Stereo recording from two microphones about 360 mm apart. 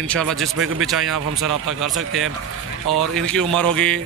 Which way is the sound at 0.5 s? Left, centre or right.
Right.